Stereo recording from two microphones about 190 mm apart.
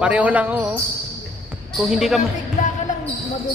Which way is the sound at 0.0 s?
10° right (ahead or behind).